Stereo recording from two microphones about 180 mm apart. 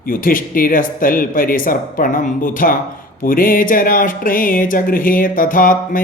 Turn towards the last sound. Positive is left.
turn(degrees=50)  # may be behind; listen again after turning